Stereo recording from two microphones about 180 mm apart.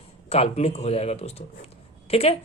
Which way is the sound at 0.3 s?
35° left (ahead or behind).